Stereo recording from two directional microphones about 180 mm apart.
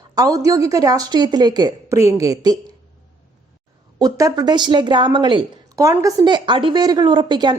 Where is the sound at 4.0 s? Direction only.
20° right (ahead or behind).